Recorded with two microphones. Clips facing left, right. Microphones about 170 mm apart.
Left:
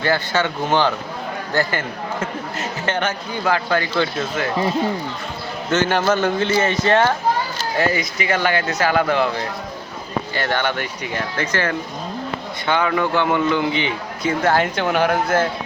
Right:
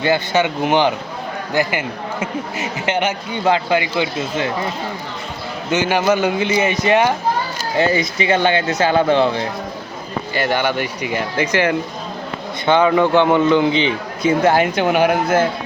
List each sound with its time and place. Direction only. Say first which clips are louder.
0.0 s a man's voice: right 3 dB; 20° right (ahead or behind)
5.7 s a man's voice: right 2 dB; 10° right (ahead or behind)
7.8 s a man's voice: right 4 dB; 25° right (ahead or behind)
10.3 s a man's voice: right 4 dB; 10° right (ahead or behind)